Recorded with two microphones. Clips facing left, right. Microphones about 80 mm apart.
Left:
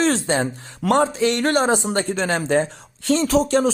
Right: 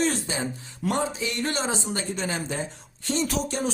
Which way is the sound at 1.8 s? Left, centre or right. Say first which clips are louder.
Left 8 dB; left.